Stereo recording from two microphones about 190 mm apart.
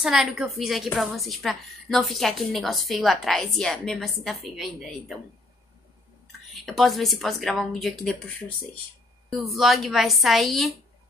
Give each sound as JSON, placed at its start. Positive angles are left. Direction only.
{"t": 0.0, "sound": "a woman's voice", "side_deg": -5}
{"t": 6.5, "sound": "a woman's voice", "side_deg": 0}